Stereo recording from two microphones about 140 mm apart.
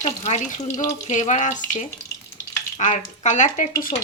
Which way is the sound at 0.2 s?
55° left (ahead or behind).